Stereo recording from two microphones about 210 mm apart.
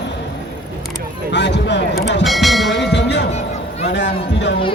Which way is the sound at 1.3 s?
55° left (ahead or behind).